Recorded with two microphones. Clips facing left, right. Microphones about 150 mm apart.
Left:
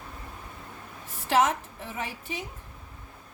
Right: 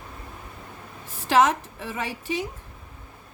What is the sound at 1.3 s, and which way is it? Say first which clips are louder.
A woman's voice: right 4 dB; 90° right.